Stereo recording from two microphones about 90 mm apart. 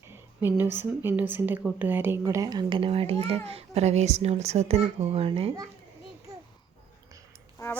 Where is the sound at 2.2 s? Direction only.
40° right (ahead or behind).